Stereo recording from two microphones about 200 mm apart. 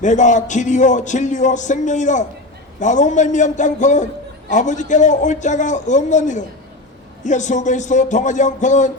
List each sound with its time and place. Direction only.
0.0 s a man's voice: 35° left (ahead or behind)